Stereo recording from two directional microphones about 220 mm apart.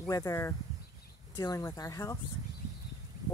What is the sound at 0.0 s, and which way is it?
Speech, 15° left (ahead or behind).